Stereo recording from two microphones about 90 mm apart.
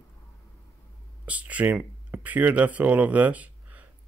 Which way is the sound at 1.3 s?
15° right (ahead or behind).